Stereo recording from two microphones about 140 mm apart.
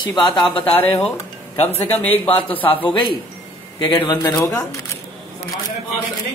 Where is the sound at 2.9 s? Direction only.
35° left (ahead or behind).